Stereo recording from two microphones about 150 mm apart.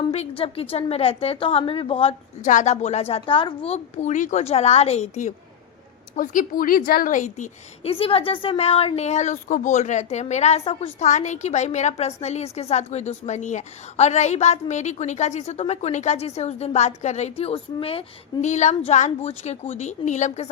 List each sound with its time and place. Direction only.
0.1 s a woman's voice: 40° left (ahead or behind)
2.4 s speech: 55° left (ahead or behind)
6.1 s a woman's voice: 65° left (ahead or behind)
7.9 s speech: 40° left (ahead or behind)
18.4 s speech: 50° left (ahead or behind)